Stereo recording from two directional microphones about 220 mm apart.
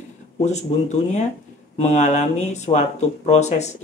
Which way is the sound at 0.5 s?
30° left (ahead or behind).